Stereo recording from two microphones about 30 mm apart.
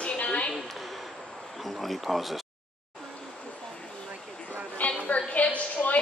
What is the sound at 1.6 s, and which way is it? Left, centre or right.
Speech, centre.